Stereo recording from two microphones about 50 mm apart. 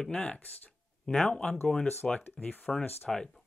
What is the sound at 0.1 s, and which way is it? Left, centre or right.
Speech, left.